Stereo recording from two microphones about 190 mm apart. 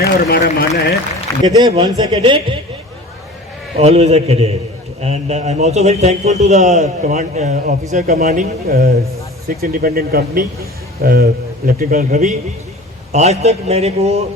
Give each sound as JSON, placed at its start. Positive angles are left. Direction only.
{"t": 0.0, "sound": "a man's voice", "side_deg": 55}
{"t": 1.5, "sound": "speech", "side_deg": -20}
{"t": 3.8, "sound": "a man's voice", "side_deg": -35}